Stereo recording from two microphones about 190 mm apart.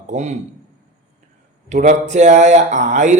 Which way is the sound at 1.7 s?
40° right (ahead or behind).